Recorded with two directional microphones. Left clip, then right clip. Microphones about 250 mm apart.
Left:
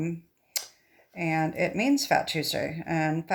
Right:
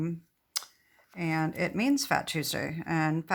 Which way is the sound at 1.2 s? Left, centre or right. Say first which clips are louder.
Left 4 dB; centre.